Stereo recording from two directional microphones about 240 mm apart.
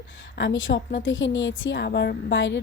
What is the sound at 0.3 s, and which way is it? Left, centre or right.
A woman's voice, left.